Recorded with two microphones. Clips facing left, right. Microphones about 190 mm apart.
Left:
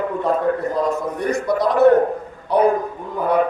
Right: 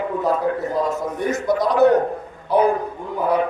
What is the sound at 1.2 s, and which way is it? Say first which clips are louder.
Speech: right 2 dB; centre (ahead or behind).